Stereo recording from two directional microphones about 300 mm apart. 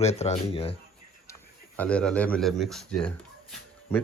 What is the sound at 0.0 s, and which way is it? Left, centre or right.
Speech, left.